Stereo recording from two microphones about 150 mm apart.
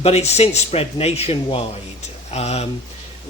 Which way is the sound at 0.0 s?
45° left (ahead or behind).